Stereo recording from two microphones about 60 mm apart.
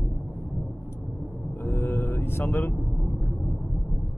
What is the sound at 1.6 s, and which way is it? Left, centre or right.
Mantra, left.